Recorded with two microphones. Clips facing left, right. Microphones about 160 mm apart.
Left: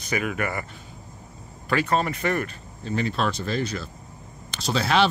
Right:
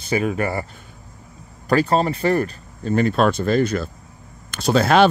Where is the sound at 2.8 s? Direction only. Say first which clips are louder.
Right 8 dB; 50° right (ahead or behind).